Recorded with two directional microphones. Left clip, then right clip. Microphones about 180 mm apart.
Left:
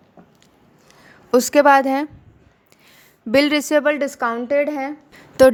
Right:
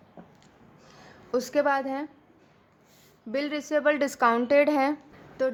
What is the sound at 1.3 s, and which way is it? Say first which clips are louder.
Speech: left 12 dB; 40° left (ahead or behind).